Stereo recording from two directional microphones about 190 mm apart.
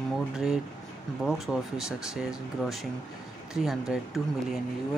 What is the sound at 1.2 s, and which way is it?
Speech, centre (ahead or behind).